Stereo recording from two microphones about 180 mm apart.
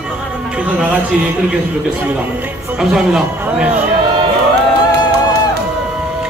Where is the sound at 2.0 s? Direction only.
10° right (ahead or behind).